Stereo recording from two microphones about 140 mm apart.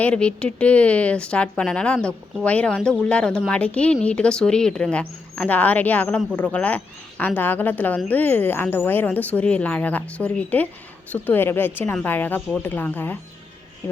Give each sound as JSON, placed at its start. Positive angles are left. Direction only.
{"t": 0.0, "sound": "speech", "side_deg": 10}